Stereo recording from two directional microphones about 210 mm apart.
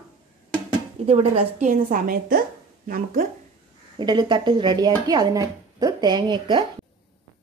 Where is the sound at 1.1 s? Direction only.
30° right (ahead or behind).